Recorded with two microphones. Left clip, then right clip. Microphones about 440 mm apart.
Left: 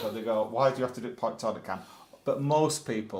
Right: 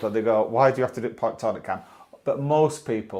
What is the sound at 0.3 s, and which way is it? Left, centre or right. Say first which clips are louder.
Speech: right 6 dB; right.